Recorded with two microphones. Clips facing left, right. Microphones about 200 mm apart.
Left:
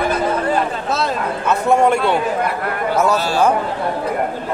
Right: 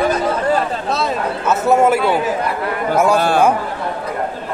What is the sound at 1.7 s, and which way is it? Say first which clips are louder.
Speech: right 1 dB; 5° right (ahead or behind).